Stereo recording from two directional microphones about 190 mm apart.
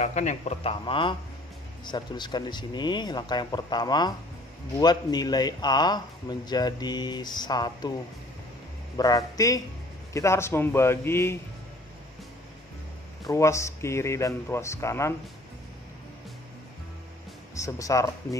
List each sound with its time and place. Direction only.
0.0 s a man's voice: 40° left (ahead or behind); by 7.9 s 20° left (ahead or behind)
8.9 s a man's voice: 20° left (ahead or behind)
13.3 s speech: 15° left (ahead or behind)
17.6 s speech: 15° left (ahead or behind)